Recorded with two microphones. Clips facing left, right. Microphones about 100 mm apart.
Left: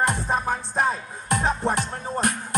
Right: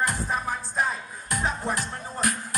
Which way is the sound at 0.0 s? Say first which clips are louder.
Left 4 dB; 25° left (ahead or behind).